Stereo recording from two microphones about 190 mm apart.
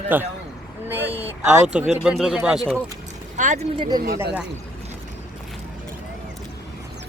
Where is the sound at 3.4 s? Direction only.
40° right (ahead or behind).